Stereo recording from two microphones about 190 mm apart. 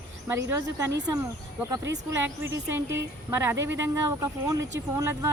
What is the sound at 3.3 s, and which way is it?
Speech, 10° right (ahead or behind).